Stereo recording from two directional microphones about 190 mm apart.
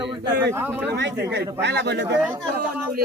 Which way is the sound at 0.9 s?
65° right (ahead or behind).